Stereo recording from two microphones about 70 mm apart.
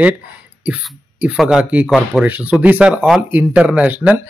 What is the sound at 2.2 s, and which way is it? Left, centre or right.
Speech, right.